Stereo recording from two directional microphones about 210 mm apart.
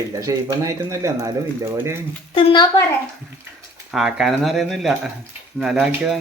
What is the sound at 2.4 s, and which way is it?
Speech, 25° left (ahead or behind).